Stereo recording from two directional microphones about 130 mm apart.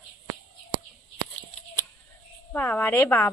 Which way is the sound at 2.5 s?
15° left (ahead or behind).